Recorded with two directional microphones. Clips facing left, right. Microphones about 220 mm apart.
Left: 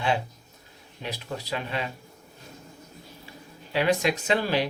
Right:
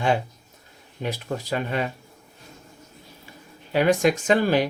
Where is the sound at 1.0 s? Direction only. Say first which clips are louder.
Right 6 dB; 50° right (ahead or behind).